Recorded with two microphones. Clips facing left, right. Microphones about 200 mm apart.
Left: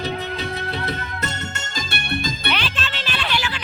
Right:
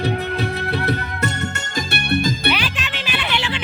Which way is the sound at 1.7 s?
65° right (ahead or behind).